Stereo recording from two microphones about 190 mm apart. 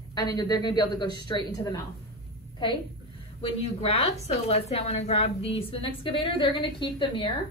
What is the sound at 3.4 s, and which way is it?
A woman's voice, 30° left (ahead or behind).